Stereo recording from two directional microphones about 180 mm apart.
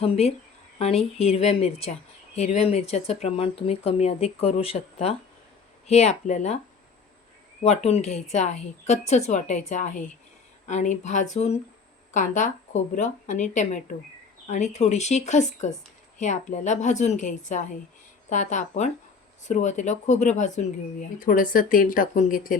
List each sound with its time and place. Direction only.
0.0 s speech: 35° left (ahead or behind)
7.6 s speech: 35° left (ahead or behind)